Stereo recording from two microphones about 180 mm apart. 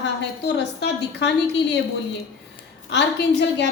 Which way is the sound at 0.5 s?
70° left (ahead or behind).